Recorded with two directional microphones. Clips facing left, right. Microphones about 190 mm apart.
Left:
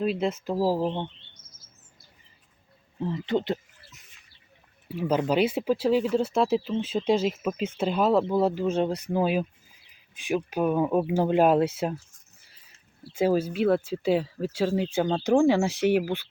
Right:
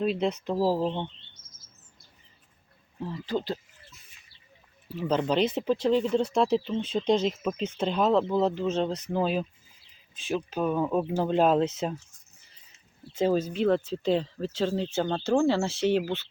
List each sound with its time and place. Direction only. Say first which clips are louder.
0.0 s speech: even; 5° left (ahead or behind)
3.0 s speech: left 4 dB; 20° left (ahead or behind)
4.9 s speech: left 2 dB; 10° left (ahead or behind)
13.1 s speech: left 2 dB; 10° left (ahead or behind)